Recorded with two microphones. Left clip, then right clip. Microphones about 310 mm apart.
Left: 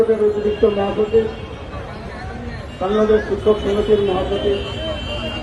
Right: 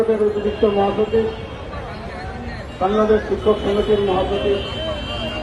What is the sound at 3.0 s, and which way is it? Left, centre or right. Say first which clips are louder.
A man's voice: left 2 dB; right.